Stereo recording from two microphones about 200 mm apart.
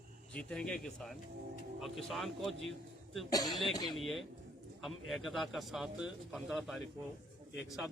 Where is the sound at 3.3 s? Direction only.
20° left (ahead or behind).